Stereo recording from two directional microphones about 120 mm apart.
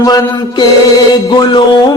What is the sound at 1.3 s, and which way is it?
Music, 40° left (ahead or behind).